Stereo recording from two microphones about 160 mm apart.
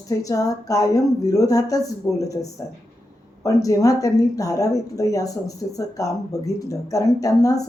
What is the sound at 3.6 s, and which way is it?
A woman's voice, 20° left (ahead or behind).